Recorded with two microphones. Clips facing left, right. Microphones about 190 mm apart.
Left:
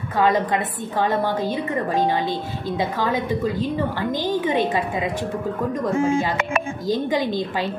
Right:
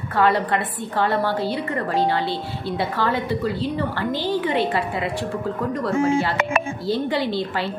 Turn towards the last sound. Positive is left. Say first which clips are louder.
# even
turn(degrees=15)  # may be behind; listen again after turning